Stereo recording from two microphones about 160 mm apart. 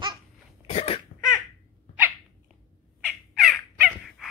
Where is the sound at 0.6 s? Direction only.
40° left (ahead or behind).